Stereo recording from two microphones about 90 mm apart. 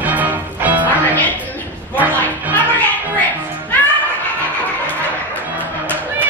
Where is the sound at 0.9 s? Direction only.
20° left (ahead or behind).